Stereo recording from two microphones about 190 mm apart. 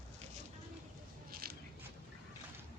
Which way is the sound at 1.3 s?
55° right (ahead or behind).